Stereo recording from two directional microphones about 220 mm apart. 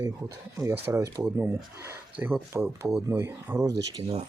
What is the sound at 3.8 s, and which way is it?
Speech, 25° right (ahead or behind).